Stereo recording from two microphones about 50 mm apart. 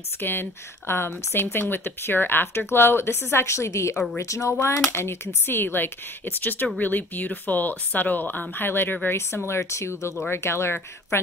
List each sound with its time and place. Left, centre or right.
0.2 s speech: left
4.2 s speech: left
4.9 s speech: left
9.6 s speech: left
10.3 s speech: left